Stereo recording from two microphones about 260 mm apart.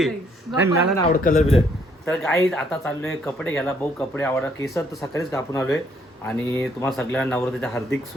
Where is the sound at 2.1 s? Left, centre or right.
Centre.